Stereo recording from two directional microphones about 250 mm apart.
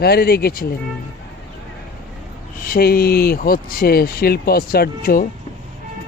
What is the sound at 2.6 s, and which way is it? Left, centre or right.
Speech, left.